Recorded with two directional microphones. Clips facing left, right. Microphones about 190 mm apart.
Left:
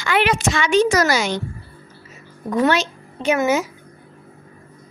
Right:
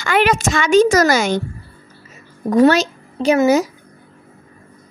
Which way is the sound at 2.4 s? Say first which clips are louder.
Right 6 dB; 40° right (ahead or behind).